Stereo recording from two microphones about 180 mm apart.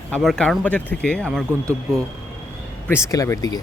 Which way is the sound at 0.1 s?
5° left (ahead or behind).